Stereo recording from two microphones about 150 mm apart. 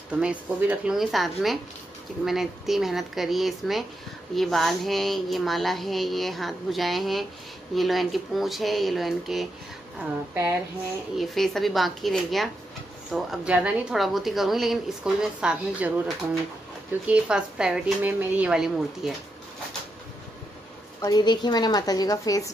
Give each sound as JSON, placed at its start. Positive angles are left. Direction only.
{"t": 0.1, "sound": "speech", "side_deg": -10}
{"t": 9.9, "sound": "a woman's voice", "side_deg": -15}
{"t": 11.1, "sound": "speech", "side_deg": 0}
{"t": 17.0, "sound": "speech", "side_deg": -5}
{"t": 21.0, "sound": "a woman's voice", "side_deg": 25}